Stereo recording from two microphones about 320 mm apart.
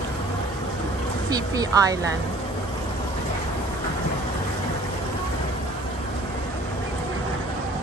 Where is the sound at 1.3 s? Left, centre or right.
Centre.